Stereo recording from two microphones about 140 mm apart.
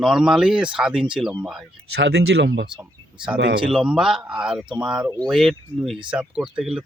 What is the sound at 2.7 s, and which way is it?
Speech, 5° right (ahead or behind).